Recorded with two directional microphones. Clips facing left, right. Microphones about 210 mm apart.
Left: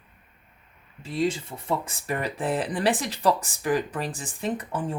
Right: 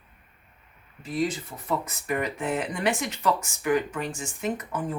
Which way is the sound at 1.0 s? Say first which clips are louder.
Left 2 dB; 25° left (ahead or behind).